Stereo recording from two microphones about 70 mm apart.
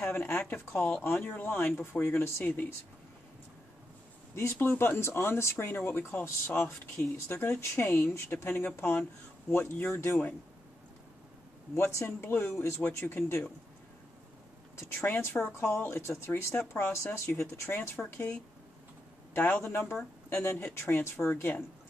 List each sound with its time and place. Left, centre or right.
0.0 s a woman's voice: left
4.4 s speech: left
7.2 s speech: left
11.7 s speech: left
14.8 s a man's voice: left
19.6 s speech: left